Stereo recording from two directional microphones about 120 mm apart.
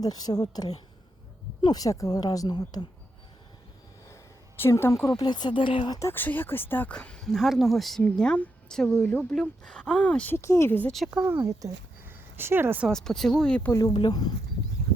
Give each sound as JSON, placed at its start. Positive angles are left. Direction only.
{"t": 0.0, "sound": "speech", "side_deg": 30}
{"t": 4.1, "sound": "a sound", "side_deg": 20}
{"t": 5.2, "sound": "speech", "side_deg": 35}
{"t": 5.9, "sound": "speech", "side_deg": 20}
{"t": 7.3, "sound": "speech", "side_deg": 0}
{"t": 10.3, "sound": "speech", "side_deg": 25}
{"t": 10.9, "sound": "speech", "side_deg": -5}
{"t": 11.4, "sound": "speech", "side_deg": -20}
{"t": 12.9, "sound": "speech", "side_deg": 5}
{"t": 13.7, "sound": "speech", "side_deg": 25}
{"t": 13.9, "sound": "speech", "side_deg": 40}